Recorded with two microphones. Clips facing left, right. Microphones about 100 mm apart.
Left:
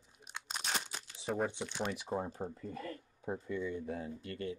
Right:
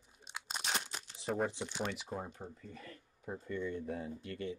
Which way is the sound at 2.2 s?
35° left (ahead or behind).